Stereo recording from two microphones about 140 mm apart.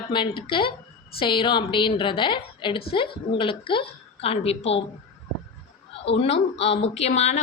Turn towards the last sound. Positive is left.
turn(degrees=50)  # may be behind; listen again after turning